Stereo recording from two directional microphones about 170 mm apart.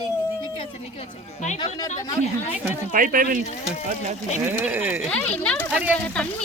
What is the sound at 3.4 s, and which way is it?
Speech, 40° left (ahead or behind).